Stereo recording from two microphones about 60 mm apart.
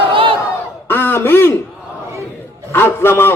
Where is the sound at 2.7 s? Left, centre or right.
Left.